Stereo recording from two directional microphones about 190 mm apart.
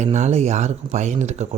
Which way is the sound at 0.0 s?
35° right (ahead or behind).